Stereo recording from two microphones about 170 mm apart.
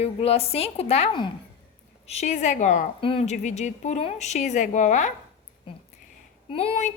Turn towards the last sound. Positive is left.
turn(degrees=40)  # may be behind; listen again after turning